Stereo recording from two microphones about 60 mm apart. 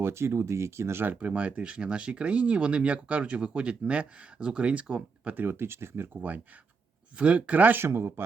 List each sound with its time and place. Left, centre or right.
0.0 s speech: right
1.0 s speech: right
5.3 s speech: right
7.2 s speech: right
7.8 s speech: right